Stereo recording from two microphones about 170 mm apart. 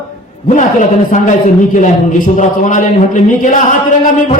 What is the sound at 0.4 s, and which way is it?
A man's voice, 45° left (ahead or behind).